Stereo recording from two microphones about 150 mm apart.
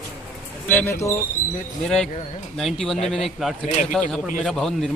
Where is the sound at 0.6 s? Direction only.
15° left (ahead or behind).